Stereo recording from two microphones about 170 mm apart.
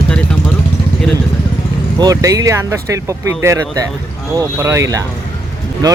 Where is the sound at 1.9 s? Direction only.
20° right (ahead or behind).